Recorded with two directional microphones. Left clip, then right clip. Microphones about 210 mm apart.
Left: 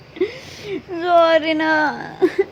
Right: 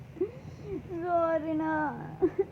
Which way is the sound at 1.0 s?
90° left.